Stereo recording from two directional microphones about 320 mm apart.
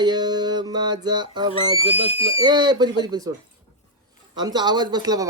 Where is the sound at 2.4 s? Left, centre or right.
Centre.